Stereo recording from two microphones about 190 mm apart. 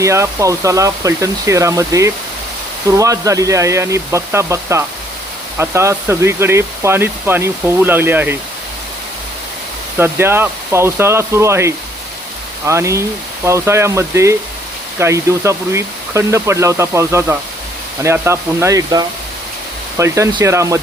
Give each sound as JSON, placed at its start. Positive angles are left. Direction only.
{"t": 0.0, "sound": "speech", "side_deg": -15}
{"t": 10.0, "sound": "speech", "side_deg": -10}